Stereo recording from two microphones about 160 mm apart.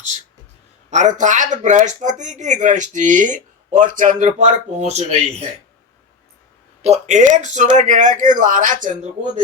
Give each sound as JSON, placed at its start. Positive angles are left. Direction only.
{"t": 0.9, "sound": "speech", "side_deg": -50}
{"t": 6.8, "sound": "speech", "side_deg": -45}